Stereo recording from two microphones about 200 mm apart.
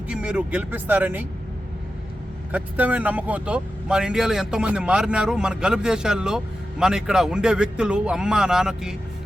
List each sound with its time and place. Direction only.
0.1 s speech: 5° right (ahead or behind)
2.5 s speech: 10° right (ahead or behind)